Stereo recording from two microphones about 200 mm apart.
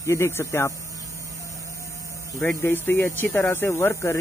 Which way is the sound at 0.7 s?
15° right (ahead or behind).